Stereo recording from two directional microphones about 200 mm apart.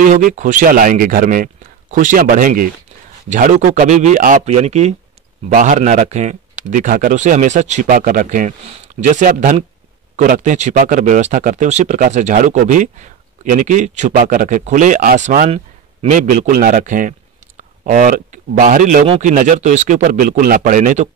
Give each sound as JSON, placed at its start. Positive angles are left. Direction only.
{"t": 0.0, "sound": "speech", "side_deg": -40}
{"t": 19.0, "sound": "speech", "side_deg": -30}
{"t": 19.3, "sound": "speech", "side_deg": -40}